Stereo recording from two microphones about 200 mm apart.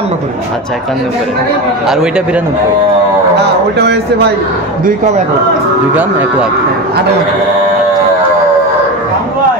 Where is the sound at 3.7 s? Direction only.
55° right (ahead or behind).